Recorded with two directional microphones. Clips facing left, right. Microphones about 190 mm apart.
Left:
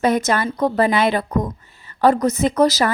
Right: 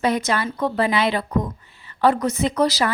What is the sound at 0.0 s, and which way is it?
A woman's voice, 45° left (ahead or behind).